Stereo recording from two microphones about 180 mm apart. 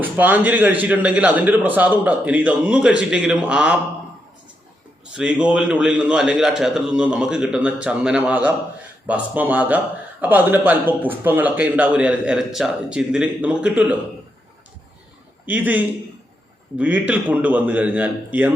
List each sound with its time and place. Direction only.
0.0 s speech: 10° right (ahead or behind)
5.1 s a man's voice: 5° right (ahead or behind)
15.4 s speech: 10° right (ahead or behind)